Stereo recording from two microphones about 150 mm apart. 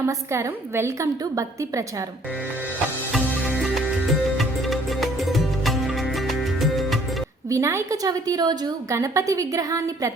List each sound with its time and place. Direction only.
0.0 s a woman's voice: 15° right (ahead or behind)
4.4 s music: centre (ahead or behind)
7.5 s a woman's voice: 20° right (ahead or behind)